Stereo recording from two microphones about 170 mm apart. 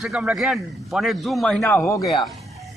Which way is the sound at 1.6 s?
15° left (ahead or behind).